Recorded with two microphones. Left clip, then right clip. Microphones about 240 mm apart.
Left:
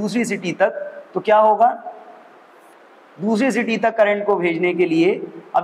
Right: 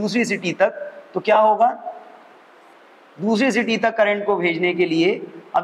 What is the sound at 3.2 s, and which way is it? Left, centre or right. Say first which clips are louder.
A man's voice: even; right.